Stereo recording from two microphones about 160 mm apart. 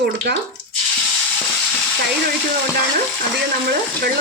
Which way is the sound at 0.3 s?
90° right.